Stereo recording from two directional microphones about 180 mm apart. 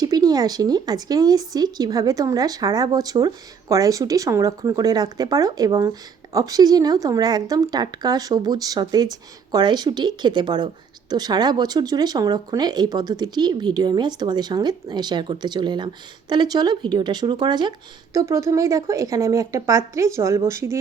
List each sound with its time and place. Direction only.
0.0 s a woman's voice: 20° right (ahead or behind)